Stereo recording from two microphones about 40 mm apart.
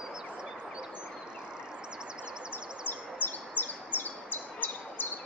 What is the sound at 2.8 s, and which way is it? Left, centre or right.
Bird, left.